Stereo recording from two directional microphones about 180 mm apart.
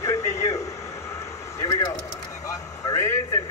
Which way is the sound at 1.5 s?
20° left (ahead or behind).